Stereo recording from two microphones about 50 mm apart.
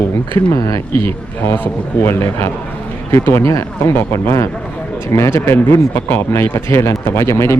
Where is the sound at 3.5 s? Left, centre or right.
Left.